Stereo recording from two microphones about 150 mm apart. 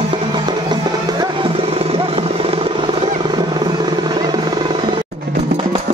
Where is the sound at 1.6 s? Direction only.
40° right (ahead or behind).